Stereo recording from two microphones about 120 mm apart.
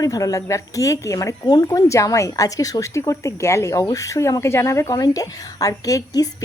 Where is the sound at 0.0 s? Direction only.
30° left (ahead or behind).